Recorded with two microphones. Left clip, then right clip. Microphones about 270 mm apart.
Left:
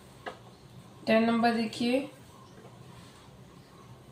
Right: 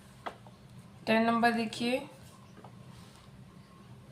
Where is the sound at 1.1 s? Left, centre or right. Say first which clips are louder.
Left 1 dB; right.